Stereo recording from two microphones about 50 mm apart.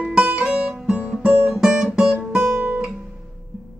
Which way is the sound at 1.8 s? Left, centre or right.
Centre.